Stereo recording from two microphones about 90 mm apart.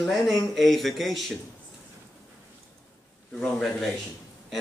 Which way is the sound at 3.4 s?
5° left (ahead or behind).